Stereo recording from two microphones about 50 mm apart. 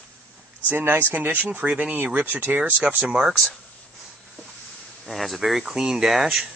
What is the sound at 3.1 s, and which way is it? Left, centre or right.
Speech, centre.